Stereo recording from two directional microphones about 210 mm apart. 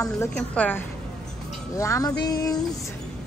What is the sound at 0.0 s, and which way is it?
Speech, 10° left (ahead or behind).